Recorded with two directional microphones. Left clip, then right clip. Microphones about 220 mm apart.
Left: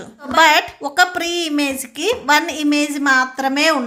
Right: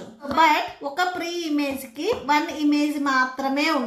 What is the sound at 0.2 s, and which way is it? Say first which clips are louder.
Speech: left 6 dB; 45° left (ahead or behind).